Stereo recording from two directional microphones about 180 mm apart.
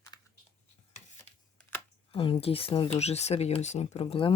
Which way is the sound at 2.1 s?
30° left (ahead or behind).